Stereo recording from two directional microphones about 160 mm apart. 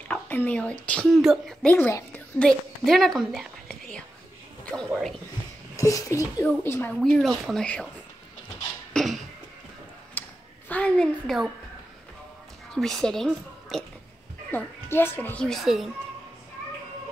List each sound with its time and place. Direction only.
0.1 s a sound: 10° left (ahead or behind)
0.8 s a woman's voice: 5° left (ahead or behind)
5.8 s speech: 20° left (ahead or behind)
7.0 s speech: centre (ahead or behind)
8.9 s a sound: centre (ahead or behind)
10.2 s a sound: 10° left (ahead or behind)
10.7 s speech: 5° left (ahead or behind)
12.7 s a woman's voice: 5° left (ahead or behind)
14.5 s a woman's voice: 15° left (ahead or behind)